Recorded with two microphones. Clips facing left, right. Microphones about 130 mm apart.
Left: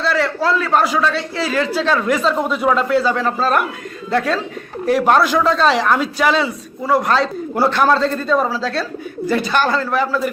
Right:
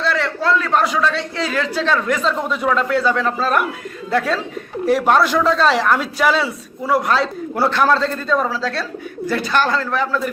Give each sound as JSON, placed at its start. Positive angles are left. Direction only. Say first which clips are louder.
{"t": 0.0, "sound": "a man's voice", "louder": "left 2 dB", "side_deg": 5}